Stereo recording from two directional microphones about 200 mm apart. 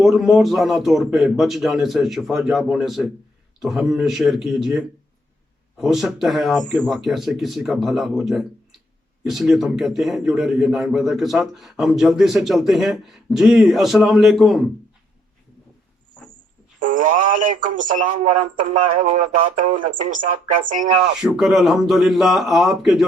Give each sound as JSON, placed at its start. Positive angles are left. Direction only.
{"t": 0.0, "sound": "a man's voice", "side_deg": 0}
{"t": 16.8, "sound": "speech", "side_deg": -40}
{"t": 19.5, "sound": "speech", "side_deg": -40}
{"t": 21.2, "sound": "a man's voice", "side_deg": 0}